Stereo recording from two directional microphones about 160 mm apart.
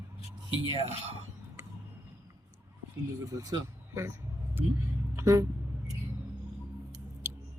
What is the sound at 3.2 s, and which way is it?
Speech, 20° right (ahead or behind).